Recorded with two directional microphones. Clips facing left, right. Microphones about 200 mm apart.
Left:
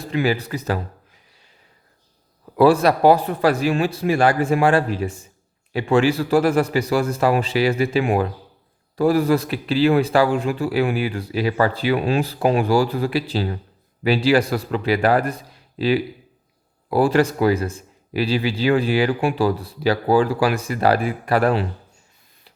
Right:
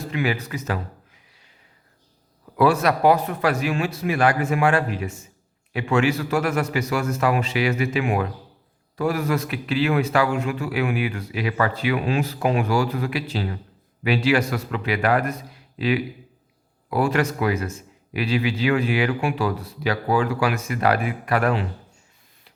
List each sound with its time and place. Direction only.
0.0 s a man's voice: 35° left (ahead or behind)
2.6 s a man's voice: 30° left (ahead or behind)